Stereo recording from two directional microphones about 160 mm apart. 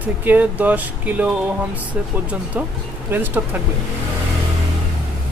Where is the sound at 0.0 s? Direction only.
10° right (ahead or behind).